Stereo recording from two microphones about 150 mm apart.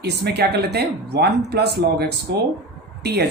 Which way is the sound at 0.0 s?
90° right.